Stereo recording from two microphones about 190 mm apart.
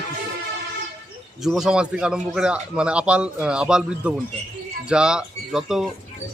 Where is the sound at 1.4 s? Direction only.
5° right (ahead or behind).